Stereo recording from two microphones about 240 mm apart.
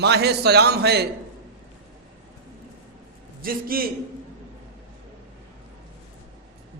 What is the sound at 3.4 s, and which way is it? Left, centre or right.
Speech, right.